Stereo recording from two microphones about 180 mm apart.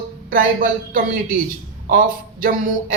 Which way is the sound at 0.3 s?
50° right (ahead or behind).